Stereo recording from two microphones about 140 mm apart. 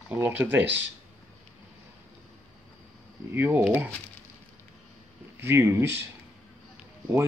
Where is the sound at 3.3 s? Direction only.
15° right (ahead or behind).